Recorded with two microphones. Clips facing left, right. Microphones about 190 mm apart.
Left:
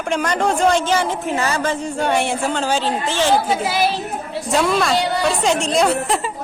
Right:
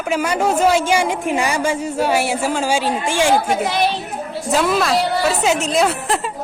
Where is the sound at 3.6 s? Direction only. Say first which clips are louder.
Even; 5° left (ahead or behind).